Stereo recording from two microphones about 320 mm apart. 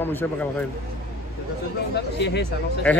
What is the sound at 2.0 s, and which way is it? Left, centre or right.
Speech, left.